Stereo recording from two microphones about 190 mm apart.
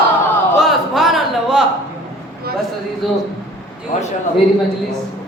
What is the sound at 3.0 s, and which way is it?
Speech, centre (ahead or behind).